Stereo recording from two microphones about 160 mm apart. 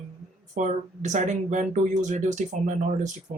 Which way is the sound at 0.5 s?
50° right (ahead or behind).